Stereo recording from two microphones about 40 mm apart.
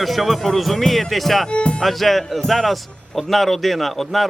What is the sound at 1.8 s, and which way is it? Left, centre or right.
A man's voice, centre.